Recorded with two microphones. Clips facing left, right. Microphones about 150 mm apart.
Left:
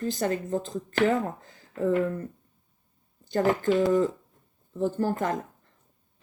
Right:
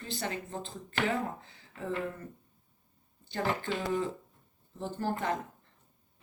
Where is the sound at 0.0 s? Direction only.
45° left (ahead or behind).